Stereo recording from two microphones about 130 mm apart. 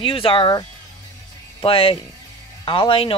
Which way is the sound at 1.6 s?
45° left (ahead or behind).